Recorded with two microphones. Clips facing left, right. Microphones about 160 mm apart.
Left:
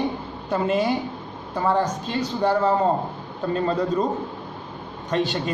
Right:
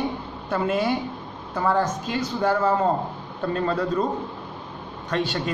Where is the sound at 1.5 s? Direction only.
15° left (ahead or behind).